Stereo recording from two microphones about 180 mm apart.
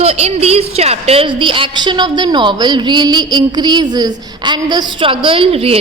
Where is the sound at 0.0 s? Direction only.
35° right (ahead or behind).